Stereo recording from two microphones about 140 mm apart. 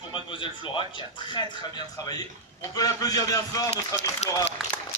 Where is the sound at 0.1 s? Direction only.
35° left (ahead or behind).